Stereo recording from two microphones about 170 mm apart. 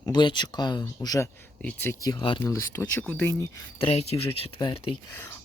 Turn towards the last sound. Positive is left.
turn(degrees=30)  # may be behind; listen again after turning